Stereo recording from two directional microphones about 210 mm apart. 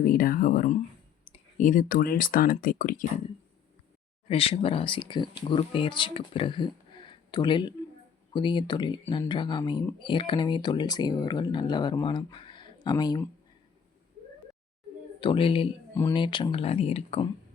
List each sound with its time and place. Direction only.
0.0 s speech: 45° left (ahead or behind)
4.3 s speech: 25° left (ahead or behind)
15.2 s speech: 25° left (ahead or behind)